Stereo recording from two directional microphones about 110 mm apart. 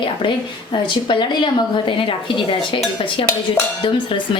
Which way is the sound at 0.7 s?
45° left (ahead or behind).